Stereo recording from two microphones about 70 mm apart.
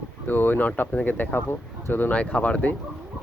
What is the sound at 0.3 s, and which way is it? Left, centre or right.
Speech, left.